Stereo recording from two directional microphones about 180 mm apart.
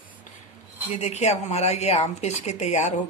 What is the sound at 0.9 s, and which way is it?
Speech, 40° left (ahead or behind).